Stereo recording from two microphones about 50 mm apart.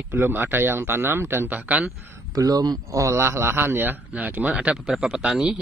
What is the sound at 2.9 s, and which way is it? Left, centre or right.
A man's voice, right.